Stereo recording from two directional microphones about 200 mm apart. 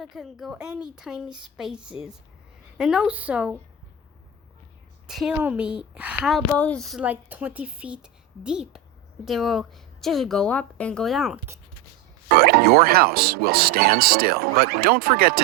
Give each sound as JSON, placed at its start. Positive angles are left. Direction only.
{"t": 0.0, "sound": "a woman's voice", "side_deg": 0}
{"t": 5.0, "sound": "a woman's voice", "side_deg": 0}
{"t": 12.3, "sound": "speech", "side_deg": -50}